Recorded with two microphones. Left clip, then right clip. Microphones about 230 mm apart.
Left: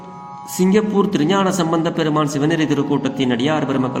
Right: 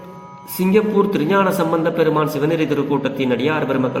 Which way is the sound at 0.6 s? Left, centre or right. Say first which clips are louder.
Right 1 dB; left.